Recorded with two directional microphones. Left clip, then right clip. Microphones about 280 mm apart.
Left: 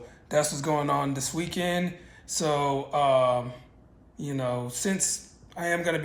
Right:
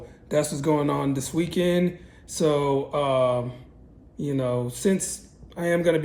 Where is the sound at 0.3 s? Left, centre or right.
Centre.